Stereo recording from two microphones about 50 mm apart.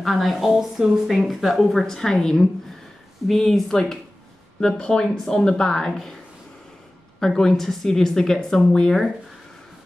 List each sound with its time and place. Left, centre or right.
0.0 s speech: centre
1.6 s speech: centre
4.6 s speech: centre
7.2 s speech: centre